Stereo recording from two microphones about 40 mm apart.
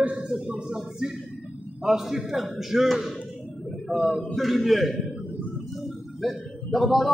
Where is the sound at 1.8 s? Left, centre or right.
Centre.